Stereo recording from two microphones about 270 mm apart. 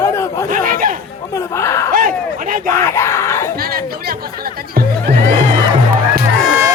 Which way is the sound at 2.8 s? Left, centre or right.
Centre.